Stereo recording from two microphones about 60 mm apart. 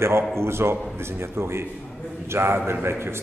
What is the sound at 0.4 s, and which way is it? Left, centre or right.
A man's voice, right.